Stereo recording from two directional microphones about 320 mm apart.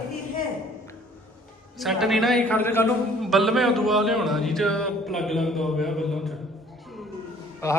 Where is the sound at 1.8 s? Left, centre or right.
Centre.